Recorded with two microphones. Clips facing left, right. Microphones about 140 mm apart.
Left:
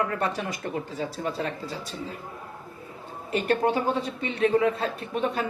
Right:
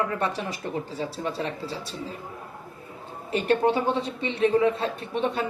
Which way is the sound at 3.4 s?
30° right (ahead or behind).